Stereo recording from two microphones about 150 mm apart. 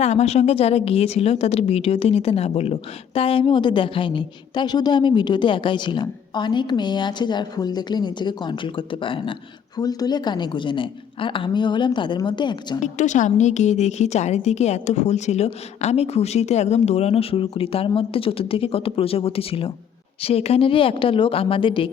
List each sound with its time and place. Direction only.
0.0 s a woman's voice: 45° left (ahead or behind); by 12.8 s 30° left (ahead or behind)
12.8 s a woman's voice: 55° left (ahead or behind); by 21.8 s 35° left (ahead or behind)